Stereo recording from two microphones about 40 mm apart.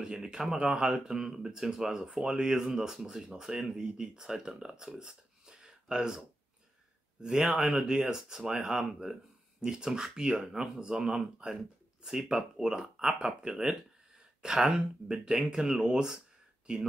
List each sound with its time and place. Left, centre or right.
0.0 s speech: centre
14.4 s speech: centre